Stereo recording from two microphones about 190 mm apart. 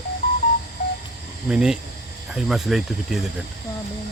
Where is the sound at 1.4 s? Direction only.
5° right (ahead or behind).